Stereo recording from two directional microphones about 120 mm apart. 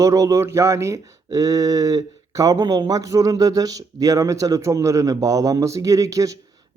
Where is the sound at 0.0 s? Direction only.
25° right (ahead or behind).